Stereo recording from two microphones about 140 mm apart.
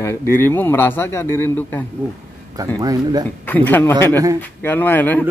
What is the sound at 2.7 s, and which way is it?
Speech, 25° right (ahead or behind).